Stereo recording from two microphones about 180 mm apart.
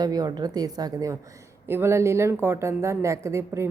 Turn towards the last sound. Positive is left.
turn(degrees=-15)  # may be behind; listen again after turning